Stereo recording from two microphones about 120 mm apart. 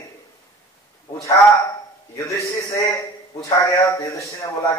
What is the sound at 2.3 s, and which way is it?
A man's voice, 25° left (ahead or behind).